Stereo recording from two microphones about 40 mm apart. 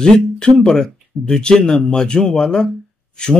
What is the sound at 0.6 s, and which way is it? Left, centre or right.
Speech, centre.